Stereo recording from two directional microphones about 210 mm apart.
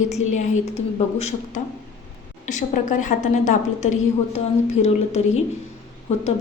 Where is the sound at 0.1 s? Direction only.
35° left (ahead or behind).